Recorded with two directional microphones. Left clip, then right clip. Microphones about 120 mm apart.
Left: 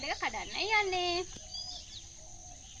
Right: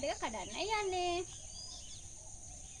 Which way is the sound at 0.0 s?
35° right (ahead or behind).